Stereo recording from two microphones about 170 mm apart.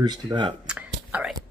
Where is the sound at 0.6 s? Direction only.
5° right (ahead or behind).